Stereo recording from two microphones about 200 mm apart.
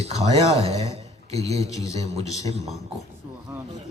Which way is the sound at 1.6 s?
15° left (ahead or behind).